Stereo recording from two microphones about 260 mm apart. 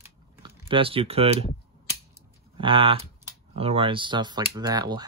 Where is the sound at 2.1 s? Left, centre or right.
Centre.